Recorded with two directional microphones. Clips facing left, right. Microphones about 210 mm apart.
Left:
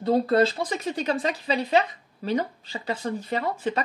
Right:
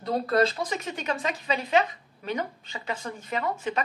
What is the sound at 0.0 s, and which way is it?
Speech, 30° left (ahead or behind).